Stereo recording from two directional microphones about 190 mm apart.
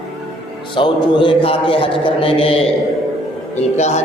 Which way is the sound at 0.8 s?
25° left (ahead or behind).